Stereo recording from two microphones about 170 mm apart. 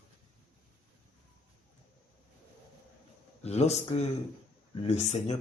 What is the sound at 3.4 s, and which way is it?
Speech, 40° left (ahead or behind).